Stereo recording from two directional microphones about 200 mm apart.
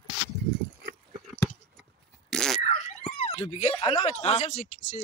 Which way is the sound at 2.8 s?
30° left (ahead or behind).